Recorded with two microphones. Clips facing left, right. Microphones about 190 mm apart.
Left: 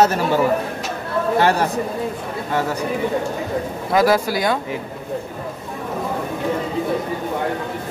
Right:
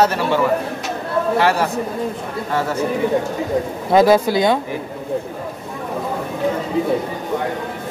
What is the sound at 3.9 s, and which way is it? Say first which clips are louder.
Speech: right 4 dB; 25° right (ahead or behind).